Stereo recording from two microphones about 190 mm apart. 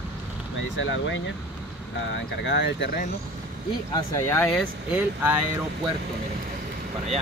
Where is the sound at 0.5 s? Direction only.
80° left; by 3.0 s 60° left (ahead or behind).